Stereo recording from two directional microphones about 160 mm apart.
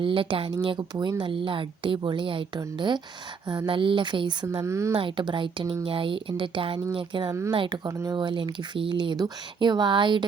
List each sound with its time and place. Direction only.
0.0 s speech: 30° right (ahead or behind)
4.6 s speech: 20° right (ahead or behind)
4.9 s speech: 30° right (ahead or behind)
7.9 s speech: 20° right (ahead or behind)